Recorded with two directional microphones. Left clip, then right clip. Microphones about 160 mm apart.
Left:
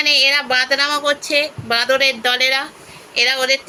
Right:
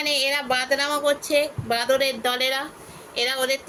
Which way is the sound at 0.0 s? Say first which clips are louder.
Left 9 dB; centre (ahead or behind).